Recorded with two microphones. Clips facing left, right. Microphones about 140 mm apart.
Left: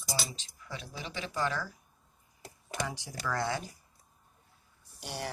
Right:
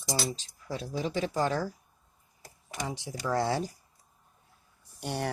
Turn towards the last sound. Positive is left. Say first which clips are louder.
# right 6 dB
turn(degrees=-55)  # may be behind; listen again after turning